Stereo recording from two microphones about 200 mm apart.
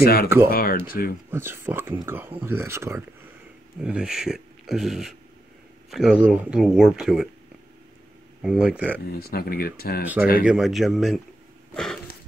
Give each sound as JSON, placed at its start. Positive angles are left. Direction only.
{"t": 0.0, "sound": "speech", "side_deg": 50}
{"t": 1.3, "sound": "speech", "side_deg": -10}
{"t": 8.4, "sound": "speech", "side_deg": -5}
{"t": 9.2, "sound": "speech", "side_deg": 50}
{"t": 10.4, "sound": "speech", "side_deg": 0}
{"t": 11.7, "sound": "throat clearing", "side_deg": 0}